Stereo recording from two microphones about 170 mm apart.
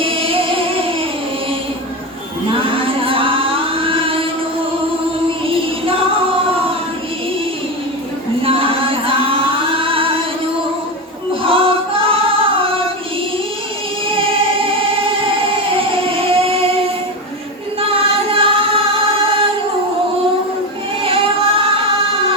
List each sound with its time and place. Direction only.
0.0 s music: 30° right (ahead or behind)
2.5 s singing: 30° right (ahead or behind)
5.5 s music: 35° right (ahead or behind)
8.4 s singing: 35° right (ahead or behind)
11.4 s female singing: 30° right (ahead or behind)
14.1 s music: 30° right (ahead or behind)
21.0 s music: 35° right (ahead or behind)